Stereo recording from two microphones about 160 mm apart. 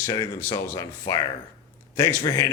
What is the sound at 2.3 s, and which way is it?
Speech, 20° left (ahead or behind).